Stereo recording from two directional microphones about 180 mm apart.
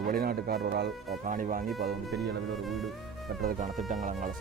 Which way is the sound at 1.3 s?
50° right (ahead or behind).